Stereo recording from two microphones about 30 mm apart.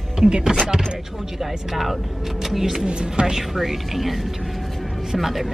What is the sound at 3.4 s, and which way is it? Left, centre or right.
A woman's voice, centre.